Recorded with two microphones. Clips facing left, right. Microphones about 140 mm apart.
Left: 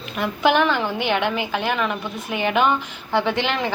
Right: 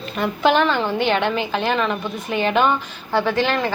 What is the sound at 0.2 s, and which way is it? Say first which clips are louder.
A woman's voice: right 1 dB; 10° left (ahead or behind).